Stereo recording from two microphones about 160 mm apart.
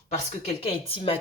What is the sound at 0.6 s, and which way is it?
Speech, 35° left (ahead or behind).